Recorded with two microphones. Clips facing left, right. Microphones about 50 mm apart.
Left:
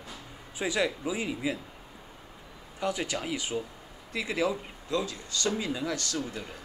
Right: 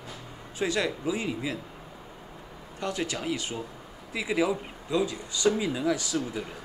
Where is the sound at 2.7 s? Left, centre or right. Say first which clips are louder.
Even; centre.